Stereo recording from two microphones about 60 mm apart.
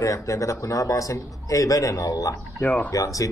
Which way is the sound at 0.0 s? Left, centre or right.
Left.